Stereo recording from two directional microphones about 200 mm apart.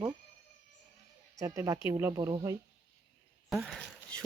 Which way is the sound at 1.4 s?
15° right (ahead or behind).